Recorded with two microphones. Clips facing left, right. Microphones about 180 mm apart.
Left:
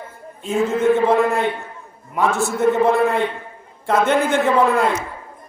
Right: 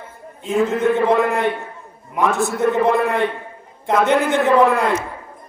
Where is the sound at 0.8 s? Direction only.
15° right (ahead or behind).